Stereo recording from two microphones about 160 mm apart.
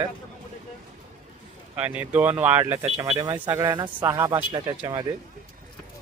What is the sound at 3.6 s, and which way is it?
A man's voice, 20° right (ahead or behind).